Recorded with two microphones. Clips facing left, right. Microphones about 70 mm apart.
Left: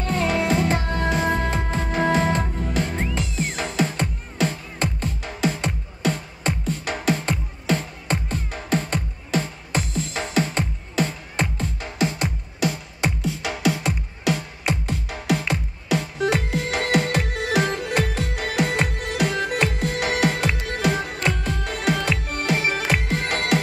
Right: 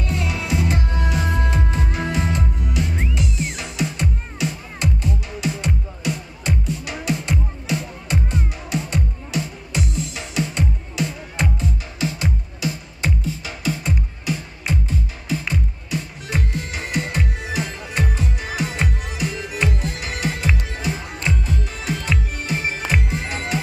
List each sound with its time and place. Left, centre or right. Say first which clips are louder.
0.0 s music: left 4 dB; left
13.2 s music: left 4 dB; left